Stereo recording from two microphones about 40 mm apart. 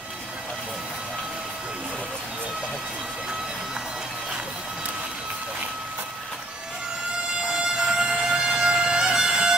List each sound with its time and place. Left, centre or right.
7.4 s music: centre